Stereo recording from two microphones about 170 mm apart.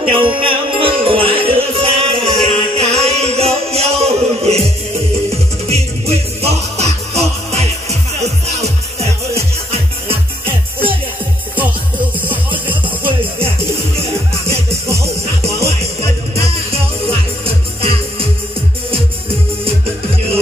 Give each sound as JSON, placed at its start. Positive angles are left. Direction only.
{"t": 0.0, "sound": "music", "side_deg": -30}
{"t": 5.7, "sound": "music", "side_deg": -35}
{"t": 14.5, "sound": "music", "side_deg": -15}
{"t": 16.4, "sound": "music", "side_deg": -35}